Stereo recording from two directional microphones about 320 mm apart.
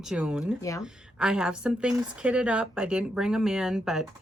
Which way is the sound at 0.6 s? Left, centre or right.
Centre.